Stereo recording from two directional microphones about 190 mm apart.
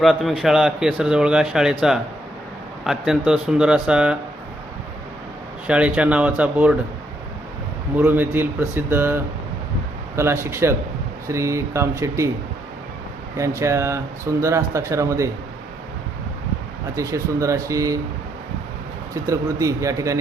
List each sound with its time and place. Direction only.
0.0 s a man's voice: centre (ahead or behind)
5.6 s speech: 5° right (ahead or behind)
7.9 s speech: 10° right (ahead or behind)
13.3 s speech: 15° right (ahead or behind)
16.9 s speech: 15° right (ahead or behind)
19.2 s speech: 15° right (ahead or behind)